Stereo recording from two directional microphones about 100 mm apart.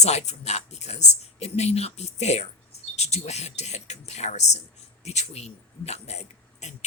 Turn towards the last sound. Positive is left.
turn(degrees=90)